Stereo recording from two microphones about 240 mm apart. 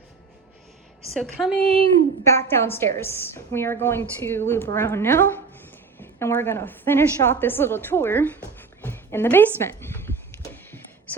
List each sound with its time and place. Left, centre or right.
1.1 s a woman's voice: centre
2.2 s a woman's voice: centre